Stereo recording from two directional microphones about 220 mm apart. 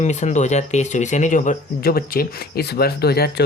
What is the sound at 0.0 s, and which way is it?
Speech, 30° left (ahead or behind).